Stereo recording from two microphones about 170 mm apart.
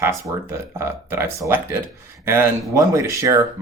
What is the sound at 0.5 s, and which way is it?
Speech, 15° right (ahead or behind).